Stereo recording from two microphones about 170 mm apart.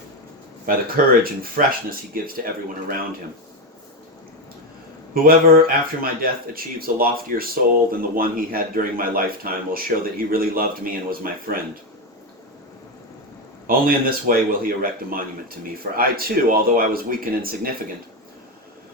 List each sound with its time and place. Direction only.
0.6 s a man's voice: 60° right (ahead or behind)
5.1 s a man's voice: 60° right (ahead or behind)
13.7 s a man's voice: 60° right (ahead or behind)